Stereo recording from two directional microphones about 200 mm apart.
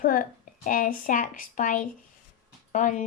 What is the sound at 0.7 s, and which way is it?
A woman's voice, 40° left (ahead or behind).